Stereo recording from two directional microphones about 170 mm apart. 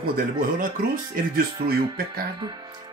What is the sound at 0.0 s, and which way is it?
Speech, 60° right (ahead or behind).